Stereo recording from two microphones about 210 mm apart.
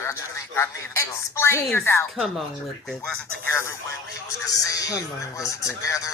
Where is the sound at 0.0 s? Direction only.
15° left (ahead or behind).